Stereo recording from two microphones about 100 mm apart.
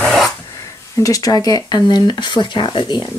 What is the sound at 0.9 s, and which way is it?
Speech, 35° left (ahead or behind).